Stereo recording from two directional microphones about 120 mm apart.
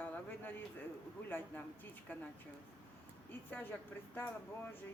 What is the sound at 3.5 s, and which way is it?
Speech, 15° left (ahead or behind).